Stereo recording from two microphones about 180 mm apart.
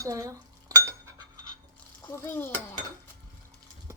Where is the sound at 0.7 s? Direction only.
20° right (ahead or behind).